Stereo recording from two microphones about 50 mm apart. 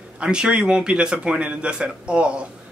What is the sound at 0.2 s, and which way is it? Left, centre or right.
Speech, centre.